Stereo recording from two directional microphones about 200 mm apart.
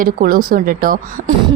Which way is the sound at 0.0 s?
45° right (ahead or behind).